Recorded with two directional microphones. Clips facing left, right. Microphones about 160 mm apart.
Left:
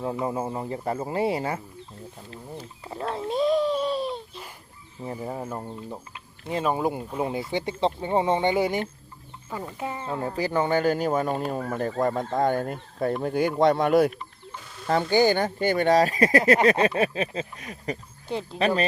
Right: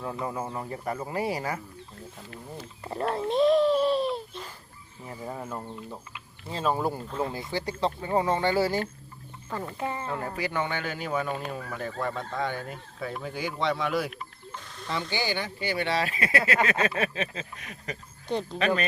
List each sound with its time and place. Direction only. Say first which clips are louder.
0.0 s speech: left 5 dB; 25° left (ahead or behind)
2.8 s speech: right 3 dB; centre (ahead or behind)
3.2 s a sound: right 1 dB; centre (ahead or behind)
5.2 s speech: left 2 dB; 25° left (ahead or behind)
5.5 s speech: left 3 dB; 15° left (ahead or behind)
10.4 s speech: left 10 dB; 35° left (ahead or behind)